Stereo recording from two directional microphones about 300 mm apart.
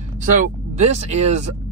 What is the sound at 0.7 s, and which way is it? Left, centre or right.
Speech, right.